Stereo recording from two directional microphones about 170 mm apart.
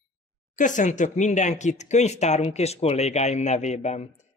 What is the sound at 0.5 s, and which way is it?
Speech, 50° left (ahead or behind).